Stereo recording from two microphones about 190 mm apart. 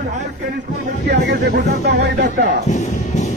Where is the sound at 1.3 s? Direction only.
60° right (ahead or behind).